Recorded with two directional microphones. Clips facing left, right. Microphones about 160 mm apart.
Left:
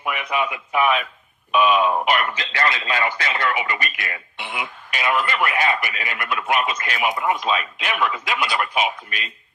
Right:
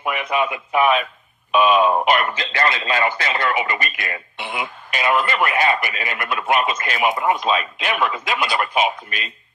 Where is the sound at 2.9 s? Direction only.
40° right (ahead or behind).